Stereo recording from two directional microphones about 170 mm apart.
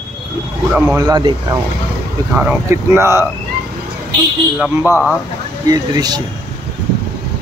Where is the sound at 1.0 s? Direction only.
25° right (ahead or behind).